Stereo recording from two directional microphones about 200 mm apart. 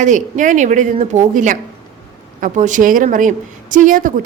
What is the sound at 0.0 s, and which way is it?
A woman's voice, 40° right (ahead or behind).